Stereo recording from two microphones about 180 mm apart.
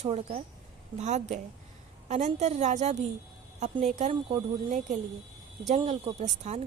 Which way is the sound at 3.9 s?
35° right (ahead or behind).